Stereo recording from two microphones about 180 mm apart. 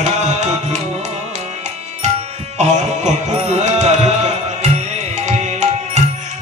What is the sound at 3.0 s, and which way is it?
Music, 40° right (ahead or behind).